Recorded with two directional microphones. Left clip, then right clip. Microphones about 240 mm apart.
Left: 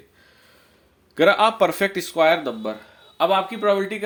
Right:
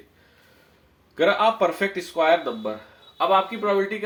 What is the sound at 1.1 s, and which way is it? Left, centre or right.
Speech, left.